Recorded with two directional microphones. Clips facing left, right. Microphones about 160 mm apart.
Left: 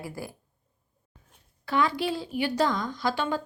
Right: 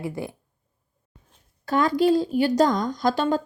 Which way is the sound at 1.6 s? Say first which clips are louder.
Right 6 dB; 40° right (ahead or behind).